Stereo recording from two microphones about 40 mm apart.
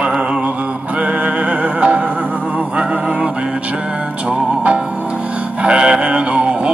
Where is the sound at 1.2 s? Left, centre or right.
Right.